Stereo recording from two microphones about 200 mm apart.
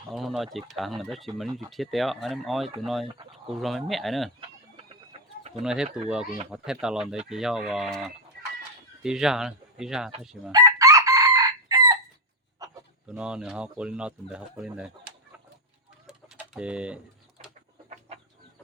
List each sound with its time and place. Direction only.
0.1 s speech: centre (ahead or behind)
5.4 s bird: 35° right (ahead or behind)
5.6 s speech: 5° right (ahead or behind)
10.5 s chicken: 15° right (ahead or behind)
12.6 s a sound: 20° right (ahead or behind)
13.1 s speech: 5° right (ahead or behind)
16.0 s bird: 5° right (ahead or behind)